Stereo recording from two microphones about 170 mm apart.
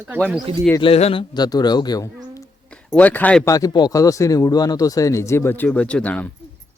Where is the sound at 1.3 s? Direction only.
25° left (ahead or behind).